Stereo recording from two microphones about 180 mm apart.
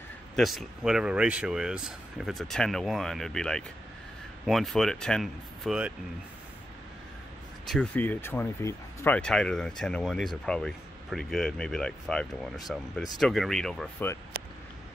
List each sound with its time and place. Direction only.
0.4 s speech: centre (ahead or behind)
7.6 s speech: 5° left (ahead or behind)
14.3 s a sound: 65° right (ahead or behind)